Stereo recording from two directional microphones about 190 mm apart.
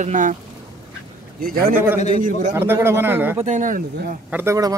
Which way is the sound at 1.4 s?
50° right (ahead or behind).